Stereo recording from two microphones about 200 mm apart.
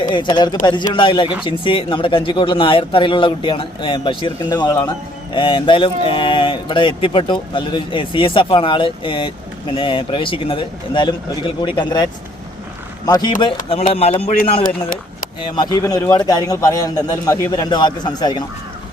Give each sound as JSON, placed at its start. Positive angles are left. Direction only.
{"t": 0.1, "sound": "speech", "side_deg": 25}
{"t": 13.1, "sound": "speech", "side_deg": 15}
{"t": 13.6, "sound": "a man's voice", "side_deg": 35}
{"t": 15.5, "sound": "speech", "side_deg": 20}